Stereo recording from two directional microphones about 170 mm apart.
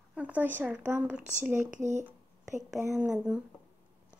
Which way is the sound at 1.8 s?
45° right (ahead or behind).